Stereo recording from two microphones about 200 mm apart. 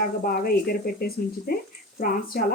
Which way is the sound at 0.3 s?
50° left (ahead or behind).